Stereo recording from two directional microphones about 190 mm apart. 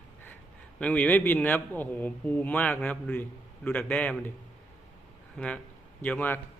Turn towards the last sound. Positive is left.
turn(degrees=10)  # may be behind; listen again after turning